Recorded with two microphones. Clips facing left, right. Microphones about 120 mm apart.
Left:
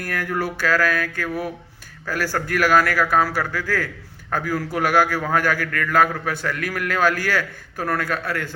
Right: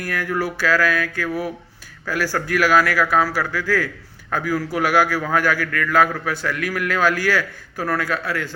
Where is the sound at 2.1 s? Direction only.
45° left (ahead or behind).